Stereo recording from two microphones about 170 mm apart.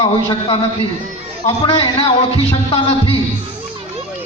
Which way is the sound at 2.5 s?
35° left (ahead or behind).